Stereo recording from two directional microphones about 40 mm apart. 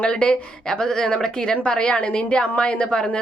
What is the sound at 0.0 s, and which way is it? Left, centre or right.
A woman's voice, left.